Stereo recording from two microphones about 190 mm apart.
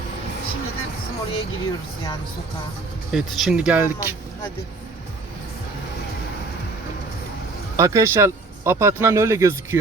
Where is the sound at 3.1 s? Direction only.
5° right (ahead or behind).